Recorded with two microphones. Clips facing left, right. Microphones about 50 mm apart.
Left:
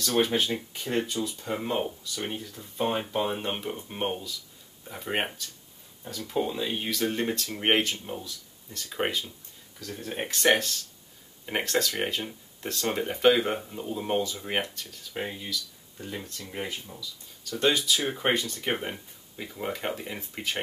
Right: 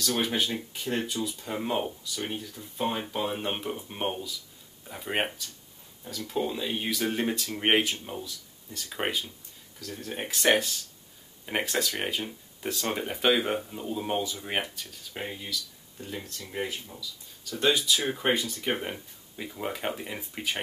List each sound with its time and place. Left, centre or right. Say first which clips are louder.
0.2 s speech: left 3 dB; centre
3.3 s speech: even; centre
9.8 s speech: left 2 dB; centre
10.2 s speech: left 1 dB; centre
11.9 s speech: left 1 dB; centre
15.1 s speech: left 2 dB; centre
16.3 s speech: left 1 dB; left
16.5 s speech: right 2 dB; centre
17.4 s a sound: left 1 dB; centre
17.6 s speech: even; centre
18.3 s speech: even; centre
18.7 s speech: left 1 dB; centre